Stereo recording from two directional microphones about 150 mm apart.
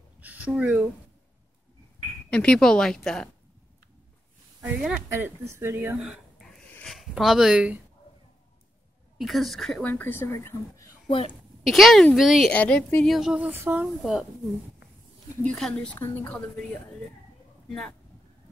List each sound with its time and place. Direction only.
0.2 s a sound: 10° right (ahead or behind)
2.3 s speech: 5° left (ahead or behind)
4.6 s speech: 10° right (ahead or behind)
6.6 s a sound: 5° left (ahead or behind)
9.2 s speech: centre (ahead or behind); by 10.9 s 20° left (ahead or behind)
11.1 s a woman's voice: 35° left (ahead or behind)
11.6 s speech: centre (ahead or behind)
15.4 s speech: 5° left (ahead or behind)